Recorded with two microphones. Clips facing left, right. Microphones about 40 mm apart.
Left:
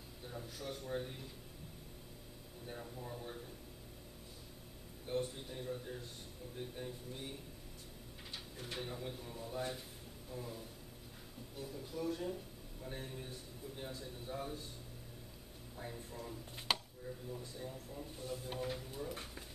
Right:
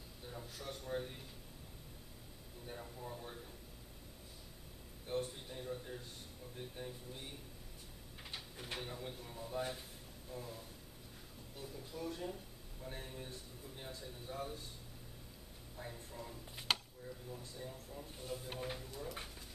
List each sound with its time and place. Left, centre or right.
0.3 s a man's voice: centre
2.6 s a man's voice: centre
5.0 s a man's voice: centre
8.3 s a sound: centre
8.7 s a man's voice: centre
15.7 s speech: centre
18.2 s speech: centre